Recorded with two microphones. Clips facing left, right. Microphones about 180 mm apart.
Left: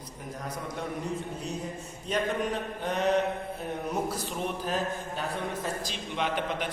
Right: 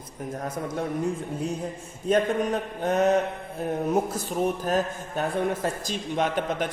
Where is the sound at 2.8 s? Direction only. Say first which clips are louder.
Right 5 dB; 45° right (ahead or behind).